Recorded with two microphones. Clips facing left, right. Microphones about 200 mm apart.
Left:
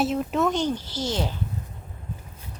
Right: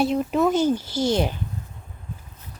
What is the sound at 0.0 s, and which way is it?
Speech, centre (ahead or behind).